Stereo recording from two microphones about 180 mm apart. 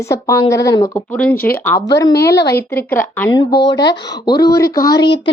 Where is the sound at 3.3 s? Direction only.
25° left (ahead or behind).